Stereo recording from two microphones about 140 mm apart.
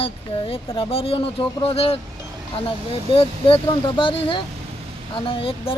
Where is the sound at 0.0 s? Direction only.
40° left (ahead or behind).